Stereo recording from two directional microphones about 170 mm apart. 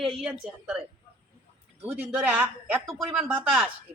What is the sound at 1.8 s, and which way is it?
Speech, 5° right (ahead or behind).